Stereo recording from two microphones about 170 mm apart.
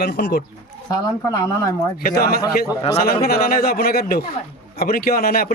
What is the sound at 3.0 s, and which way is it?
Speech, 65° left (ahead or behind).